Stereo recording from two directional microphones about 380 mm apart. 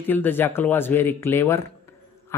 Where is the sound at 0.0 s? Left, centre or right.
Centre.